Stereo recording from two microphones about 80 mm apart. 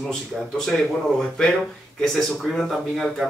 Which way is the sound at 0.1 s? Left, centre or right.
Centre.